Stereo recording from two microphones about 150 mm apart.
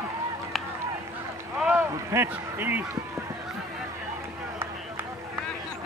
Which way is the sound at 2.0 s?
15° right (ahead or behind).